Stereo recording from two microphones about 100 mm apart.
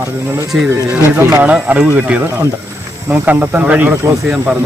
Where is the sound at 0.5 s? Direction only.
5° right (ahead or behind).